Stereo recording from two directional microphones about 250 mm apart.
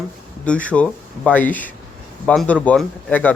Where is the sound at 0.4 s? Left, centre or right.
Centre.